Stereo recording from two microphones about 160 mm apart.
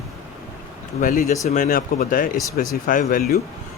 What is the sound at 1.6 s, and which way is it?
Speech, 65° left (ahead or behind).